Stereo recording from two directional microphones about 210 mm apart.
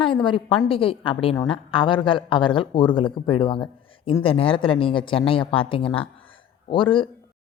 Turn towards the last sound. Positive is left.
turn(degrees=25)  # may be behind; listen again after turning